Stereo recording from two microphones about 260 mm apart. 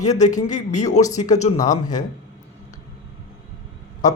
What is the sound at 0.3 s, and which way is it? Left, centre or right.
A man's voice, left.